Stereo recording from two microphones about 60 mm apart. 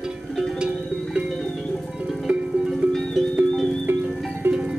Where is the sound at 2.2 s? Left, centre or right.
Centre.